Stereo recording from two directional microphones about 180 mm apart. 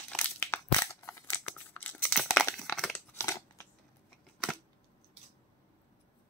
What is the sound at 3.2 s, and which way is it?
Scissors, 15° left (ahead or behind).